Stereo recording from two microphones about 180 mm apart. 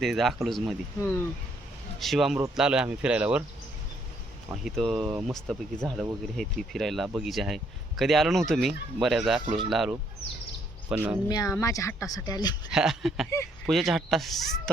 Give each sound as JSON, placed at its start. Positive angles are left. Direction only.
{"t": 0.0, "sound": "speech", "side_deg": 0}
{"t": 2.0, "sound": "speech", "side_deg": 0}
{"t": 4.6, "sound": "speech", "side_deg": 0}
{"t": 11.3, "sound": "speech", "side_deg": 20}
{"t": 12.7, "sound": "speech", "side_deg": 0}